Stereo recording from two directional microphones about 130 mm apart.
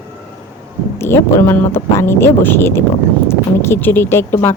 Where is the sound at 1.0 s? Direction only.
20° left (ahead or behind).